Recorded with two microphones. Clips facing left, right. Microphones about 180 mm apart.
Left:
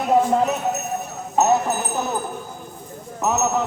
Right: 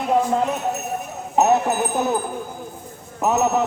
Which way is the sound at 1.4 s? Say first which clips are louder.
Right 1 dB; 15° right (ahead or behind).